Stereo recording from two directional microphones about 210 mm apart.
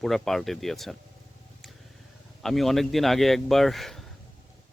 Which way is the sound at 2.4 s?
Centre (ahead or behind).